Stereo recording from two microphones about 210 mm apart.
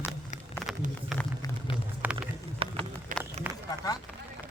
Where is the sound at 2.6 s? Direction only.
25° right (ahead or behind).